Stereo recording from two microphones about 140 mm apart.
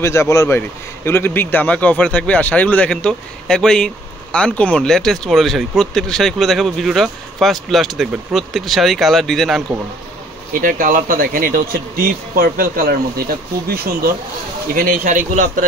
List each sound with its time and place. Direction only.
0.0 s a man's voice: 20° left (ahead or behind); by 9.6 s centre (ahead or behind)
10.5 s speech: 75° right (ahead or behind); by 14.1 s 90° right
14.7 s speech: 75° right (ahead or behind)